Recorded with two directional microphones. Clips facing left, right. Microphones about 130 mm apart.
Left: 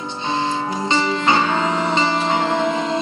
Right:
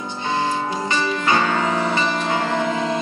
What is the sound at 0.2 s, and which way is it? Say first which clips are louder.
Music: even; 20° left (ahead or behind).